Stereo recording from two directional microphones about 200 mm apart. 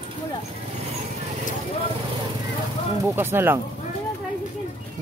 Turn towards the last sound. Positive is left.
turn(degrees=-10)  # may be behind; listen again after turning